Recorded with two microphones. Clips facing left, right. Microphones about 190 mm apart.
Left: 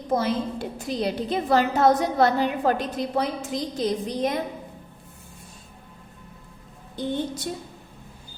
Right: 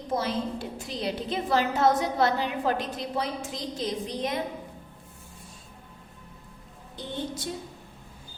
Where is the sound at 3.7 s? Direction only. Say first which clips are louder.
Left 5 dB; 45° left (ahead or behind).